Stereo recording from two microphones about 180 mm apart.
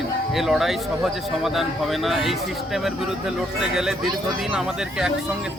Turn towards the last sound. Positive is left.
turn(degrees=-5)  # may be behind; listen again after turning